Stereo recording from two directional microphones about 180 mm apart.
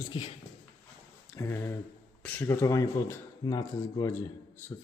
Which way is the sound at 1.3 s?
15° left (ahead or behind).